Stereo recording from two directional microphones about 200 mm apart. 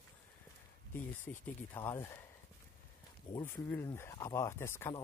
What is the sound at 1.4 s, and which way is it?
Speech, 10° left (ahead or behind).